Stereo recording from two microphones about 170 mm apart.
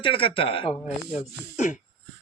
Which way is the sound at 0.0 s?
30° left (ahead or behind).